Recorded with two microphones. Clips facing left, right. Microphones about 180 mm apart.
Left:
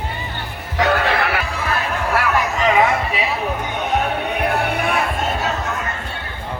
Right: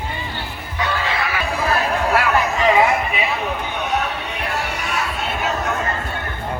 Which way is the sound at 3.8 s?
50° left (ahead or behind).